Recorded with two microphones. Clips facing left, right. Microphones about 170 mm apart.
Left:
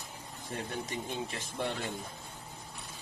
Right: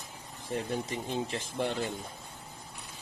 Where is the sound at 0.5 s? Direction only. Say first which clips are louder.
Right 4 dB; 25° right (ahead or behind).